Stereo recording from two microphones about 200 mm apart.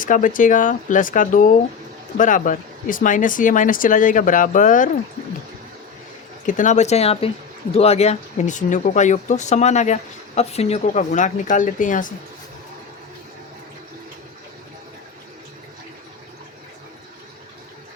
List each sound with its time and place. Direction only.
0.0 s speech: 40° left (ahead or behind)
6.4 s speech: 40° left (ahead or behind)